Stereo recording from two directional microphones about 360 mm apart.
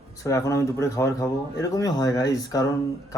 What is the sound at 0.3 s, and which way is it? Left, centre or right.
Speech, centre.